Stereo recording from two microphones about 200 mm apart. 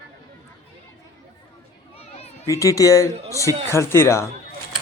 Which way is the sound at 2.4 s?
15° left (ahead or behind).